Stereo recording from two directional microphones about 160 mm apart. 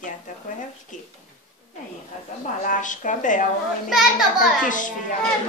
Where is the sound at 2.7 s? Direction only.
50° left (ahead or behind).